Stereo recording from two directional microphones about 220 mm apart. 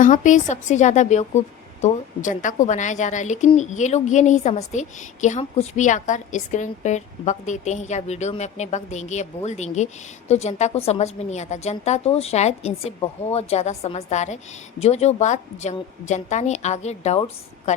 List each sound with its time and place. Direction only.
0.0 s a woman's voice: 35° left (ahead or behind)